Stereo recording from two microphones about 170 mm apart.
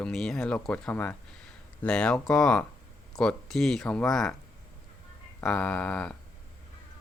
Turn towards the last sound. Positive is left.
turn(degrees=5)  # may be behind; listen again after turning